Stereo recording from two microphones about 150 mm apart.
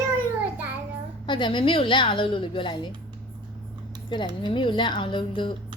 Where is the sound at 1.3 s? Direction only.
30° left (ahead or behind).